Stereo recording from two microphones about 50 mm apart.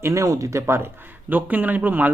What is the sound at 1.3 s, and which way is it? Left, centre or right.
Speech, right.